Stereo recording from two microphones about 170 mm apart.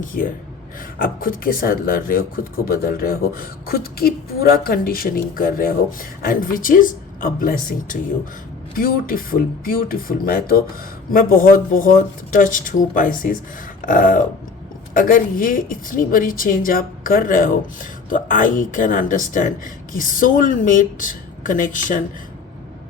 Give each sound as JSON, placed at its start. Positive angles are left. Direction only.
{"t": 0.1, "sound": "speech", "side_deg": 65}